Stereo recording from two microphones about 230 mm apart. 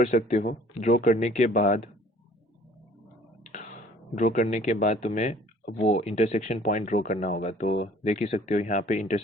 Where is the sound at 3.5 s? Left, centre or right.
Left.